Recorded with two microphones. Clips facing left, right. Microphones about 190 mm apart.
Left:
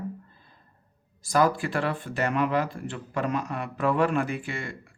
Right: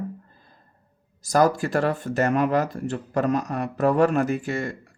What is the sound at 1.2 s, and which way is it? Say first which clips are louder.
Speech: right 3 dB; 40° right (ahead or behind).